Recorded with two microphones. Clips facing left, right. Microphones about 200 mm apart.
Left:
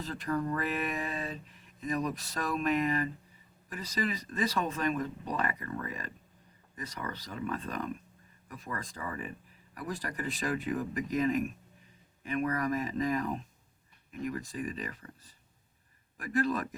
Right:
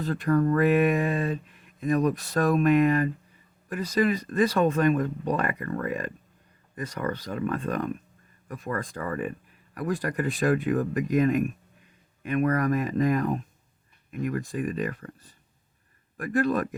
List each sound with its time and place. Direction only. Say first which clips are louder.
0.0 s speech: right 9 dB; 60° right (ahead or behind)